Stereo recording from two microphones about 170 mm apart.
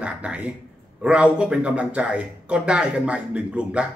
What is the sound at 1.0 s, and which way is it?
A man's voice, 5° right (ahead or behind).